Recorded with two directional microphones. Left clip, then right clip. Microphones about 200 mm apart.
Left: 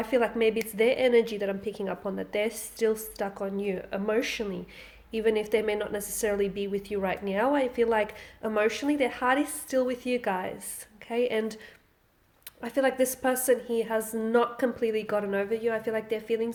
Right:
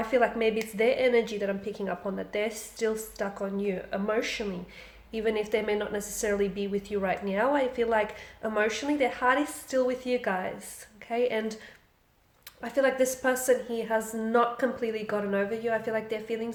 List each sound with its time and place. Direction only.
0.0 s a woman's voice: 40° left (ahead or behind)
12.6 s a woman's voice: 40° left (ahead or behind)